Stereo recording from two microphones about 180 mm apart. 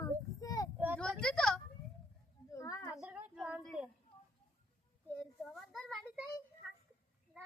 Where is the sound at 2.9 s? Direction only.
5° right (ahead or behind).